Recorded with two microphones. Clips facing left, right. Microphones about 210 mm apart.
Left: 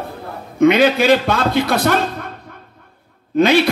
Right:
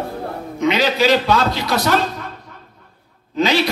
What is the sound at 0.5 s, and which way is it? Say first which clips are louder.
A man's voice: left 6 dB; 55° left (ahead or behind).